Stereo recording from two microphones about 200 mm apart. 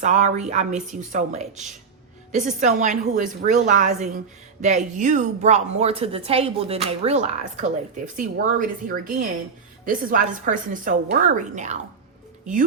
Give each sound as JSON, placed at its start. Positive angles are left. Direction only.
{"t": 0.0, "sound": "a woman's voice", "side_deg": -35}